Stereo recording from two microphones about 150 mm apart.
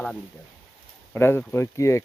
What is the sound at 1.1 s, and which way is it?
Speech, 15° left (ahead or behind).